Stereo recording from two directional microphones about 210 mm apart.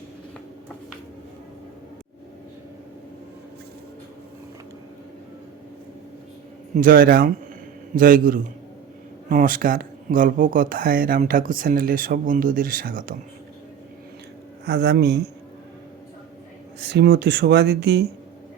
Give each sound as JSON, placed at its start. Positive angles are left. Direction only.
{"t": 6.7, "sound": "a man's voice", "side_deg": -45}
{"t": 14.6, "sound": "a man's voice", "side_deg": -55}
{"t": 16.8, "sound": "speech", "side_deg": -55}